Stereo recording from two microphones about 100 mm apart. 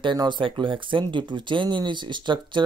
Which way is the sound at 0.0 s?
50° right (ahead or behind).